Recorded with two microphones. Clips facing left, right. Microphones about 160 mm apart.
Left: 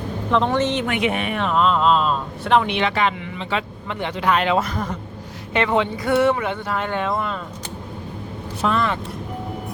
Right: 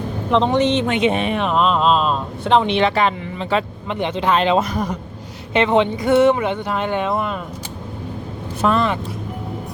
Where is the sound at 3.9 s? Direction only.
20° right (ahead or behind).